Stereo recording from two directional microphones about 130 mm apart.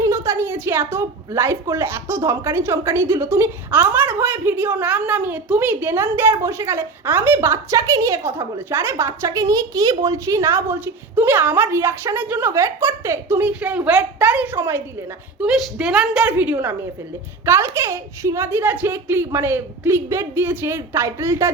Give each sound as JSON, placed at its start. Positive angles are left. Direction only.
{"t": 0.0, "sound": "a woman's voice", "side_deg": -25}
{"t": 15.4, "sound": "a woman's voice", "side_deg": -5}